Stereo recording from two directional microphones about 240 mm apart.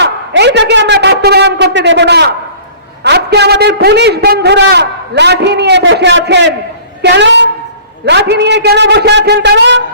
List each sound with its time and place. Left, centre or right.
0.0 s a man's voice: right